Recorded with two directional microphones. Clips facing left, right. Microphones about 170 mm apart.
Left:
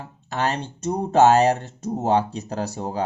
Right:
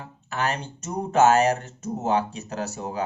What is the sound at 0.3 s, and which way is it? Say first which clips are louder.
Speech: left 3 dB; 35° left (ahead or behind).